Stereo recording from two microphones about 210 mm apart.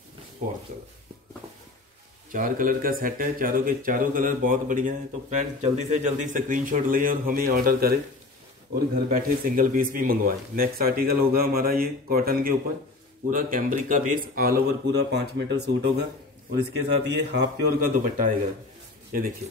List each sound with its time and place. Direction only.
0.4 s speech: 35° right (ahead or behind)
2.3 s speech: 40° right (ahead or behind)
17.0 s speech: 55° right (ahead or behind)